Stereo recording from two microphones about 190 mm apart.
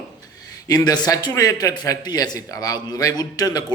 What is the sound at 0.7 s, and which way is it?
A man's voice, 20° left (ahead or behind).